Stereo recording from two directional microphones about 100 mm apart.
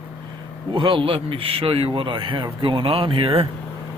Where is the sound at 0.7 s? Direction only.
55° right (ahead or behind).